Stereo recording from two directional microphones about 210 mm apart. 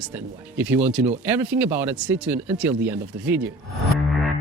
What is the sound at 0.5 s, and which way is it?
A man's voice, 10° right (ahead or behind).